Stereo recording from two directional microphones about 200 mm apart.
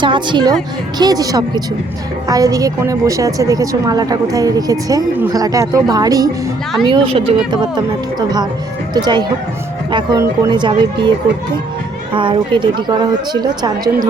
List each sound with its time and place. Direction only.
0.0 s a woman's voice: 25° right (ahead or behind)
9.0 s a woman's voice: 20° right (ahead or behind)
12.1 s a woman's voice: 25° right (ahead or behind)